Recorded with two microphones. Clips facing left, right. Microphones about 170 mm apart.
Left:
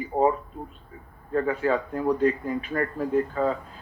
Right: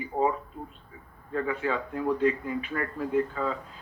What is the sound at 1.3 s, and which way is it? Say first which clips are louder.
Speech: left 5 dB; 40° left (ahead or behind).